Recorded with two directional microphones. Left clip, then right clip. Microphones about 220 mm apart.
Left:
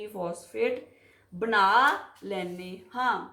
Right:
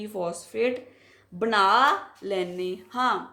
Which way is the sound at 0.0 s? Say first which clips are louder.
Right 3 dB; 45° right (ahead or behind).